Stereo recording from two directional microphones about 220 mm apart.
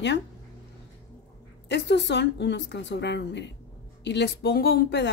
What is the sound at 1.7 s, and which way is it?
Speech, 50° left (ahead or behind).